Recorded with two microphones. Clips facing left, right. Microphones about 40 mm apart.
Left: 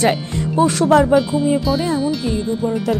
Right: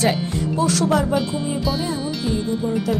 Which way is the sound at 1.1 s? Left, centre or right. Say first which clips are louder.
Left 7 dB; centre.